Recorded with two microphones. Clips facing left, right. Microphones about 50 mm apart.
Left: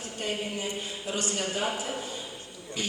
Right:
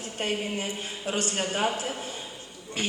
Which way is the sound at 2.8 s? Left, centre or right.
Right.